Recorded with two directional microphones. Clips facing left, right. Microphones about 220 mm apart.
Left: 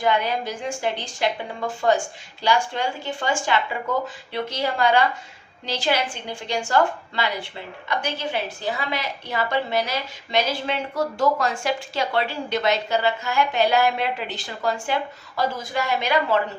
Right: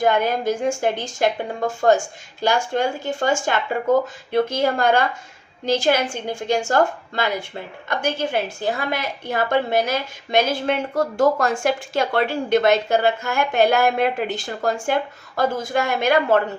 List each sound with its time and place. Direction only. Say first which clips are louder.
0.0 s a woman's voice: right 4 dB; 45° right (ahead or behind)